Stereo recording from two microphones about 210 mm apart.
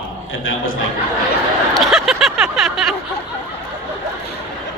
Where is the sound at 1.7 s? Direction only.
Centre (ahead or behind).